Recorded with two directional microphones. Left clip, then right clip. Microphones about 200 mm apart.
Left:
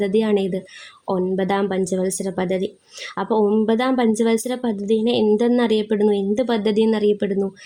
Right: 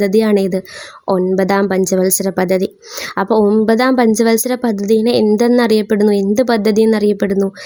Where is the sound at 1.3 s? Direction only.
35° right (ahead or behind).